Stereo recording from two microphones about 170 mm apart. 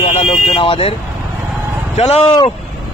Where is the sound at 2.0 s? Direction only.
40° left (ahead or behind).